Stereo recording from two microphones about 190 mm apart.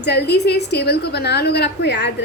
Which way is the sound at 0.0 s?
60° left (ahead or behind).